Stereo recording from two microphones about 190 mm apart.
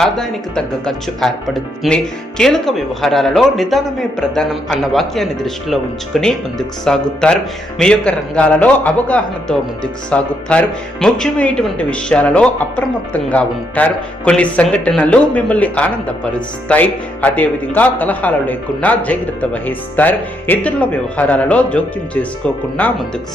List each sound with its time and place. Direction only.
0.0 s speech: centre (ahead or behind)